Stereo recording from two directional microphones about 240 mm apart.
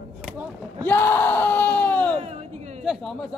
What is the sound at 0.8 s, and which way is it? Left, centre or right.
Crowd, centre.